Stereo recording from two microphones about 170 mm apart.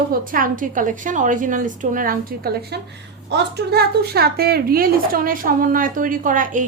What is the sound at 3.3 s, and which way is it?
A woman's voice, 75° right (ahead or behind).